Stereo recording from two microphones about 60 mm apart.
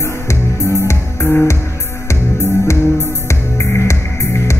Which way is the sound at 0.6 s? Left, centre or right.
Left.